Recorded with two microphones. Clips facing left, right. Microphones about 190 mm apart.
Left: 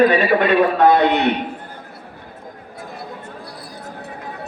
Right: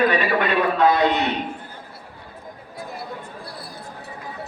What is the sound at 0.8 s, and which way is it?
Speech, 60° left (ahead or behind).